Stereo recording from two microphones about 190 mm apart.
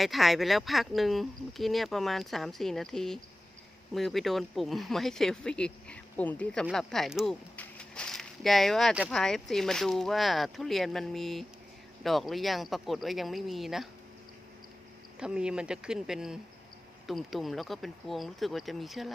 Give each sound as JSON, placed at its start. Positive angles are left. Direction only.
{"t": 0.0, "sound": "speech", "side_deg": 0}
{"t": 15.2, "sound": "speech", "side_deg": -5}